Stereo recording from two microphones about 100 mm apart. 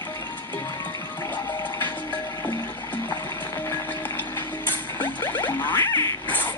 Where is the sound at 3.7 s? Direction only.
15° left (ahead or behind).